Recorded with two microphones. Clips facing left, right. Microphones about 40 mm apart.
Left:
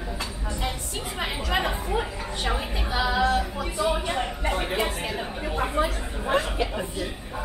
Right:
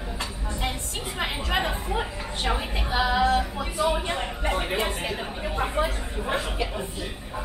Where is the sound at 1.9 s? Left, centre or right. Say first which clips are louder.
Left 1 dB; centre.